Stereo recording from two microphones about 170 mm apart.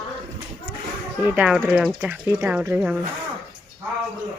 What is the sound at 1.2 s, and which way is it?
Speech, 10° right (ahead or behind).